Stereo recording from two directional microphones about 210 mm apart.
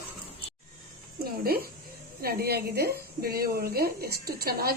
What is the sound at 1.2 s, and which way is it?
A woman's voice, 45° right (ahead or behind).